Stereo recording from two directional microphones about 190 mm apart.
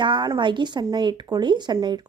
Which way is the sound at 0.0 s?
25° right (ahead or behind).